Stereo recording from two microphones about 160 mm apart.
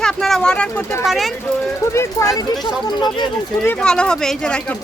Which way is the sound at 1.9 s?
15° left (ahead or behind).